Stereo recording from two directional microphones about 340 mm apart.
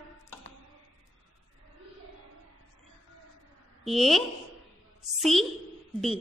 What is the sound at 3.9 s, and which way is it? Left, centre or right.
A woman's voice, centre.